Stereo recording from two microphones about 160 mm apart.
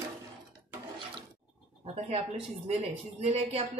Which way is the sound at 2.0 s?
40° right (ahead or behind).